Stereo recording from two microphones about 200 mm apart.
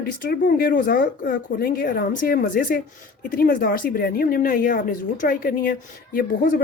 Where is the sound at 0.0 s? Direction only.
45° left (ahead or behind).